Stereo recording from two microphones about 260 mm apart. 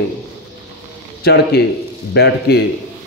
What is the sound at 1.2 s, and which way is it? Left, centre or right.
A man's voice, left.